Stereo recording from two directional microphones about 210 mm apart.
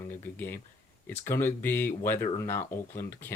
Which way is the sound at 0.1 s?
10° left (ahead or behind).